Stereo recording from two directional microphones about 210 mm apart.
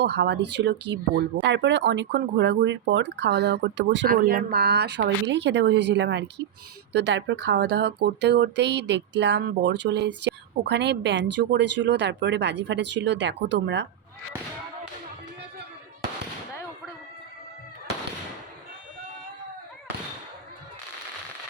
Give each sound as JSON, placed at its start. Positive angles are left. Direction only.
{"t": 0.0, "sound": "speech", "side_deg": -55}
{"t": 4.1, "sound": "speech", "side_deg": -40}